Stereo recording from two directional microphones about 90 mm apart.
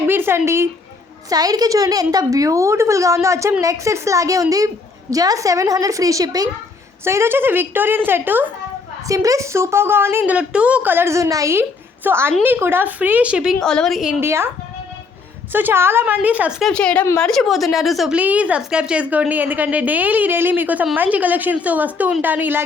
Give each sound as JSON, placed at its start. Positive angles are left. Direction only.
{"t": 0.1, "sound": "a woman's voice", "side_deg": -25}
{"t": 1.3, "sound": "a woman's voice", "side_deg": -45}
{"t": 7.0, "sound": "a woman's voice", "side_deg": -30}
{"t": 9.0, "sound": "a woman's voice", "side_deg": -40}
{"t": 10.3, "sound": "a woman's voice", "side_deg": -15}
{"t": 10.9, "sound": "a woman's voice", "side_deg": -30}
{"t": 12.0, "sound": "a woman's voice", "side_deg": -25}
{"t": 13.6, "sound": "a woman's voice", "side_deg": 10}
{"t": 14.2, "sound": "a woman's voice", "side_deg": -30}
{"t": 15.5, "sound": "a woman's voice", "side_deg": -25}
{"t": 16.7, "sound": "a woman's voice", "side_deg": 15}
{"t": 18.2, "sound": "a woman's voice", "side_deg": -15}